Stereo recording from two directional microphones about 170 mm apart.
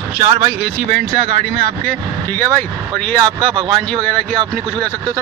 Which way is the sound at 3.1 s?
25° right (ahead or behind).